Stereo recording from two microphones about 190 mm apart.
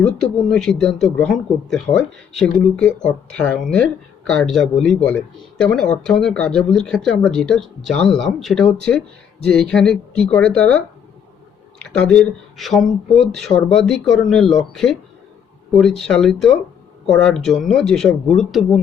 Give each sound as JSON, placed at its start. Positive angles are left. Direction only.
{"t": 0.0, "sound": "speech", "side_deg": 5}
{"t": 11.9, "sound": "speech", "side_deg": 5}